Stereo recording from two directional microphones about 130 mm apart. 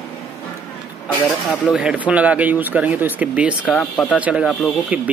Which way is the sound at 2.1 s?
10° right (ahead or behind).